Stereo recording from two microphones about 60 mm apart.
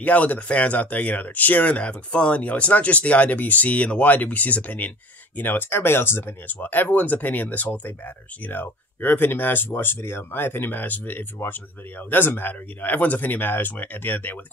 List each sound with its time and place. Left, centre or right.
0.0 s speech: left